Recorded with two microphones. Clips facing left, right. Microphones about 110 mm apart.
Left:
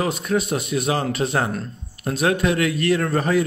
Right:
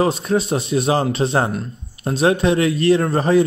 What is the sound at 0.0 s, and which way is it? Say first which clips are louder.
A man's voice: right 4 dB; 30° right (ahead or behind).